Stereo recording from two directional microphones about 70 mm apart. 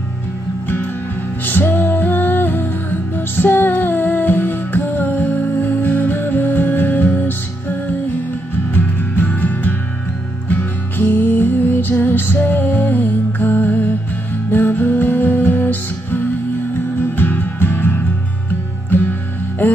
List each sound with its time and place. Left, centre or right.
1.4 s music: left
8.7 s music: left